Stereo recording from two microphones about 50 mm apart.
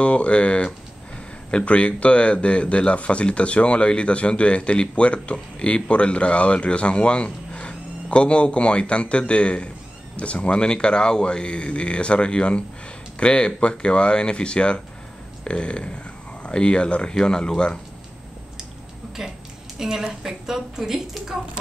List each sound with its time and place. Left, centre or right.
0.0 s speech: left
19.8 s a woman's voice: centre